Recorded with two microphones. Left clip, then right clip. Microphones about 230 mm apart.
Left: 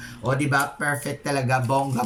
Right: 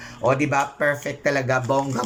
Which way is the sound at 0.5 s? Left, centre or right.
Centre.